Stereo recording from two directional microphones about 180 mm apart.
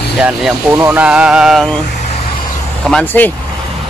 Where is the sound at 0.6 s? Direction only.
15° right (ahead or behind).